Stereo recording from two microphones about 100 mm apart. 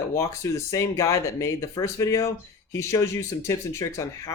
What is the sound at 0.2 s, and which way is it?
Speech, 30° left (ahead or behind).